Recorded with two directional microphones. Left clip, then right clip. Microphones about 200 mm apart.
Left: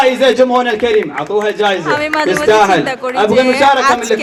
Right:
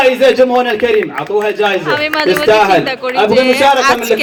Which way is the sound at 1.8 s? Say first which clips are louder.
Right 1 dB; 5° left (ahead or behind).